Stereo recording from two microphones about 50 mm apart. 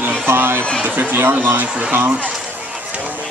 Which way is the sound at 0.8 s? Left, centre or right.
Right.